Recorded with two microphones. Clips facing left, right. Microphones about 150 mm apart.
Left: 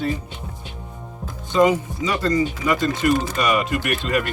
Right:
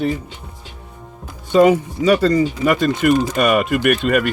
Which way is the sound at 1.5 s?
60° right (ahead or behind).